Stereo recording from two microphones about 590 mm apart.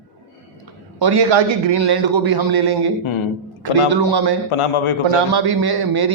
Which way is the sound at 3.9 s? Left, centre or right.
Right.